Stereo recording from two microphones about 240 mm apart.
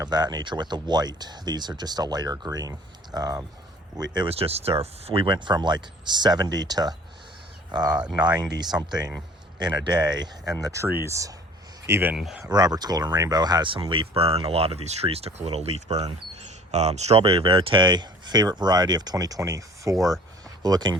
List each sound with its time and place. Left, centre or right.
0.0 s speech: centre
12.5 s speech: centre